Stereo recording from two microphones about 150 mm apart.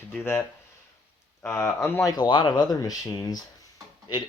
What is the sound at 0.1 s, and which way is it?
Speech, 15° left (ahead or behind).